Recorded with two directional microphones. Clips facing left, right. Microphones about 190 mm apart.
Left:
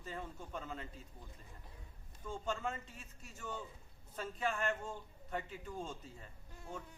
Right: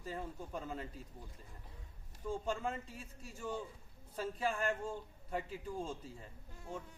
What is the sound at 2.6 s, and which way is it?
Speech, 30° right (ahead or behind).